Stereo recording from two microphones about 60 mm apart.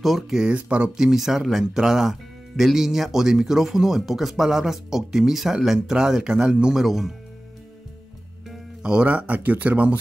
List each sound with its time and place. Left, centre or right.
0.0 s speech: centre
0.5 s speech: centre
6.7 s speech: centre
8.8 s speech: centre